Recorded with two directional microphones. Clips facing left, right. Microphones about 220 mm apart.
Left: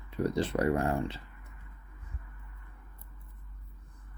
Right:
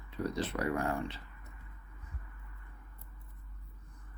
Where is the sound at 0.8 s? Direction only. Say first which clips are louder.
Left 4 dB; 25° left (ahead or behind).